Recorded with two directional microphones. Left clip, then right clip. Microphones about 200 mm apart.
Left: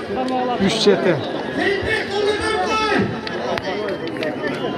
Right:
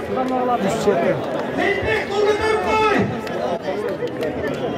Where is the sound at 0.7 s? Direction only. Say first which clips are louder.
Left 3 dB; 25° left (ahead or behind).